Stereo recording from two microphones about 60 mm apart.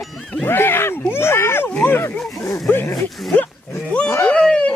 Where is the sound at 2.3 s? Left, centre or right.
Left.